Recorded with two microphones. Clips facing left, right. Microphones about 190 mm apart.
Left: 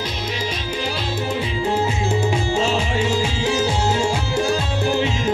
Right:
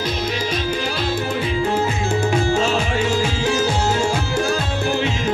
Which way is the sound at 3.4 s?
30° left (ahead or behind).